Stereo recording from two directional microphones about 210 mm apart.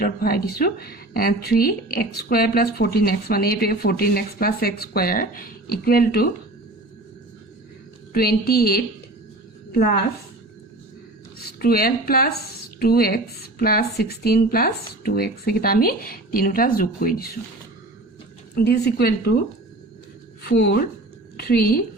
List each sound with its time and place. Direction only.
0.0 s speech: 45° left (ahead or behind)
8.1 s speech: 45° left (ahead or behind)
11.6 s speech: 45° left (ahead or behind)
18.5 s speech: 50° left (ahead or behind)
20.4 s a woman's voice: 55° left (ahead or behind)